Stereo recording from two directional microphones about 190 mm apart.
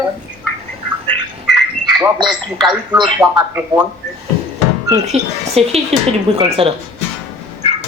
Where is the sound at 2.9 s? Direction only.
20° right (ahead or behind).